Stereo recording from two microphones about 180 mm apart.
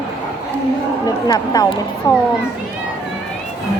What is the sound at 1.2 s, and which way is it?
Speech, 20° left (ahead or behind).